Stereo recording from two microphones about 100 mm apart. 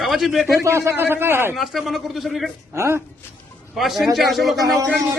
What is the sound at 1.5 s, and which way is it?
Speech, centre (ahead or behind).